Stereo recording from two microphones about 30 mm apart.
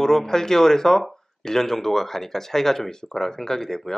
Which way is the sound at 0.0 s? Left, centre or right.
Centre.